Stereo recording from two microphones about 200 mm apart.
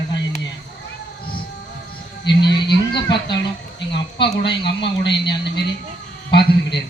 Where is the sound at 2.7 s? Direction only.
20° left (ahead or behind).